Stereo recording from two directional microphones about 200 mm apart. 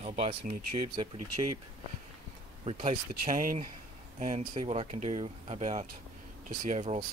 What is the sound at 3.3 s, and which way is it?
Speech, 40° right (ahead or behind).